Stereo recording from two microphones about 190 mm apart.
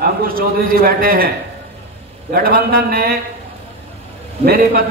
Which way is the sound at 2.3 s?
50° right (ahead or behind).